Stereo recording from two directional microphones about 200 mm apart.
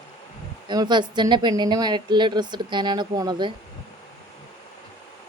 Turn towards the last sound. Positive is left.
turn(degrees=-20)  # may be behind; listen again after turning